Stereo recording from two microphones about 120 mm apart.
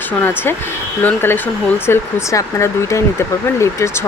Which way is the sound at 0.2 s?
20° left (ahead or behind).